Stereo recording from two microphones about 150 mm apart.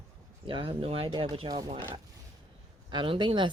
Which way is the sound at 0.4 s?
35° right (ahead or behind).